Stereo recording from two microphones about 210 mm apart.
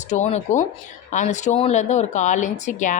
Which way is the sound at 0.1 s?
35° left (ahead or behind).